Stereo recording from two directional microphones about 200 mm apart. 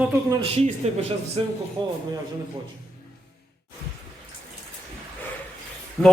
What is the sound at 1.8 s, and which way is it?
Speech, 20° right (ahead or behind).